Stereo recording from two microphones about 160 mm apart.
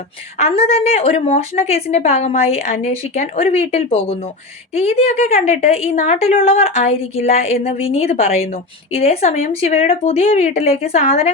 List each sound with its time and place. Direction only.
0.3 s a woman's voice: 40° left (ahead or behind)